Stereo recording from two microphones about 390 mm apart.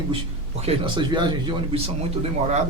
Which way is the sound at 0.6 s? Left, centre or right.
Centre.